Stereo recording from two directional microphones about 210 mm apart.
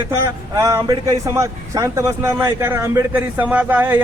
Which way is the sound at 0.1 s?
15° right (ahead or behind).